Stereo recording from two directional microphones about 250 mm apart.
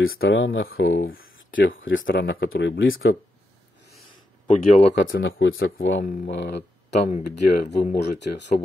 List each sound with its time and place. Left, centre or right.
0.1 s speech: left
4.5 s speech: left
5.1 s speech: left
7.1 s speech: left
8.0 s speech: left